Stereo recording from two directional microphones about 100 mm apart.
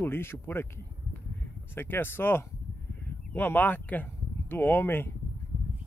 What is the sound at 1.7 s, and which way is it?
Speech, 20° left (ahead or behind).